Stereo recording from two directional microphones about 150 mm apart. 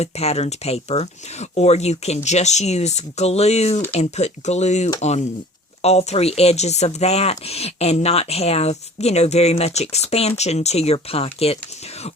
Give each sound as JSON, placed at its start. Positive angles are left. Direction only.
{"t": 0.0, "sound": "speech", "side_deg": 45}